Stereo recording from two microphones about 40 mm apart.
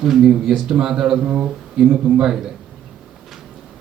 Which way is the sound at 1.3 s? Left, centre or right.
Right.